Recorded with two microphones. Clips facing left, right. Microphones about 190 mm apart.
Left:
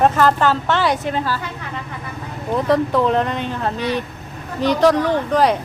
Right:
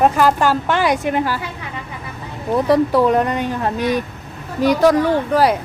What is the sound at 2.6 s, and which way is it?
Speech, 10° right (ahead or behind).